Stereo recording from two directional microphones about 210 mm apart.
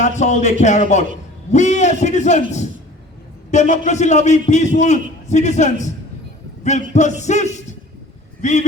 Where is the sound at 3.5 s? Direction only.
35° left (ahead or behind).